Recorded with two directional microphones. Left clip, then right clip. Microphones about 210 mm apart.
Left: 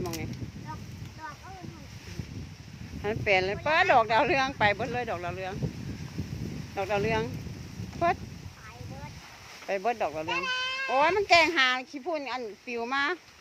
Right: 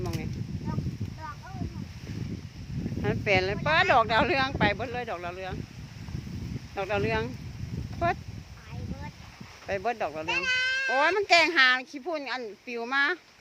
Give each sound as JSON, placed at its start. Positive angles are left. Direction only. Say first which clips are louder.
{"t": 3.0, "sound": "speech", "louder": "even", "side_deg": -10}
{"t": 6.7, "sound": "speech", "louder": "even", "side_deg": -5}
{"t": 9.6, "sound": "speech", "louder": "left 1 dB", "side_deg": -5}
{"t": 10.2, "sound": "a child's voice", "louder": "right 3 dB", "side_deg": -40}
{"t": 10.9, "sound": "speech", "louder": "left 1 dB", "side_deg": -5}